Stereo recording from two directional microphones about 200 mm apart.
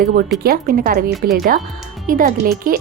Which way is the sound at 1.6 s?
Centre (ahead or behind).